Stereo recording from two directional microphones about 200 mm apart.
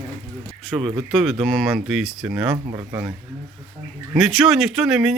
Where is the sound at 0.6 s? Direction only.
Centre (ahead or behind).